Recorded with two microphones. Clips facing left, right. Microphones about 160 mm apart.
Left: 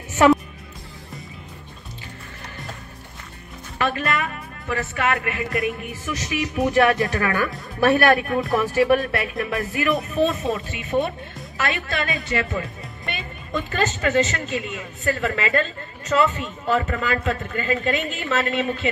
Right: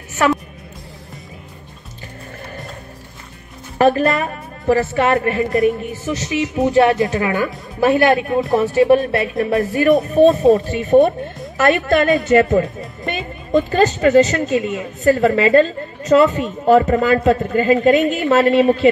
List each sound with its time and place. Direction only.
0.2 s speech: 20° left (ahead or behind)
3.7 s speech: 40° right (ahead or behind)